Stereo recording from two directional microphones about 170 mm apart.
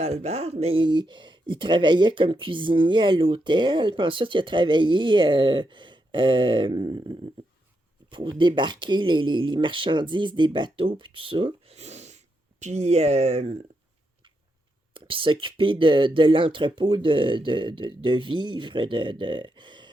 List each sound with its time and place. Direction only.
0.0 s speech: 40° right (ahead or behind)
14.9 s speech: 30° right (ahead or behind)